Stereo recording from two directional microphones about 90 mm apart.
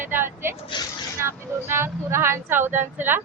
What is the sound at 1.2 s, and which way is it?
Speech, 30° right (ahead or behind).